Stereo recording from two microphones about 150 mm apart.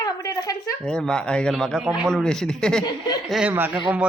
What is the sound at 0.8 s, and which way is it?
Speech, 5° left (ahead or behind).